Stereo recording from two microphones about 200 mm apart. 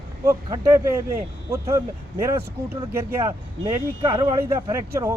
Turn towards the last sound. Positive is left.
turn(degrees=-15)  # may be behind; listen again after turning